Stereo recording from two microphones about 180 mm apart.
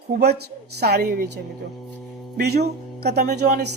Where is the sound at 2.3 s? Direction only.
60° right (ahead or behind).